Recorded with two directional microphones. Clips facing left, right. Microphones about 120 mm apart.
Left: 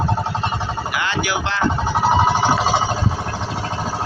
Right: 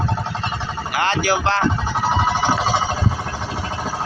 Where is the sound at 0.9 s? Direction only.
40° right (ahead or behind).